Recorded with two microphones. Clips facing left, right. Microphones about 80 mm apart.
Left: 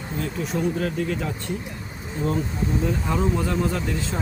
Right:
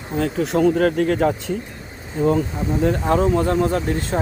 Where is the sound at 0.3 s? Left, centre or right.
Right.